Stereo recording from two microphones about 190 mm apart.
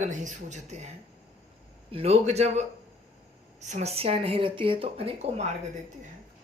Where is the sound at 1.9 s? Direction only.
35° right (ahead or behind).